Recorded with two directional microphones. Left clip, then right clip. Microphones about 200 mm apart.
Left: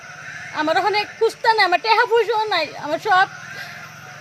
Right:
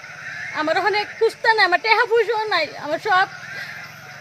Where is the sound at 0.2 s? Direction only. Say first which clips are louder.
Right 4 dB; 45° left (ahead or behind).